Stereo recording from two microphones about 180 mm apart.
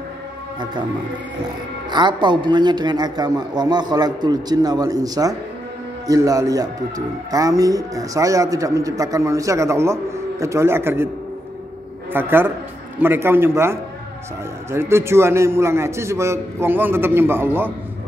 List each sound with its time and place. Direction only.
1.9 s a man's voice: 25° right (ahead or behind)
12.1 s a man's voice: 10° right (ahead or behind)